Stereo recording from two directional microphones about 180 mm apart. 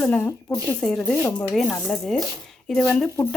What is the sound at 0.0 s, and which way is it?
Speech, 10° left (ahead or behind).